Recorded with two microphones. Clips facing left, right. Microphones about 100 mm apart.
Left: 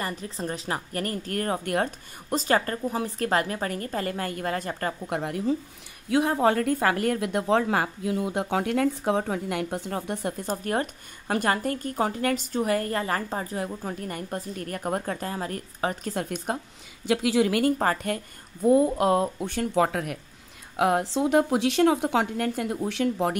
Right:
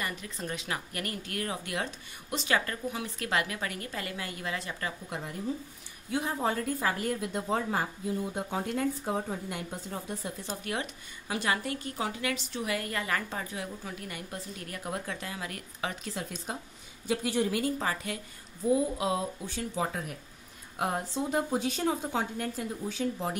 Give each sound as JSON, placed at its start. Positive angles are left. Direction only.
{"t": 0.0, "sound": "a woman's voice", "side_deg": 35}
{"t": 17.0, "sound": "a woman's voice", "side_deg": 90}
{"t": 20.7, "sound": "speech", "side_deg": 90}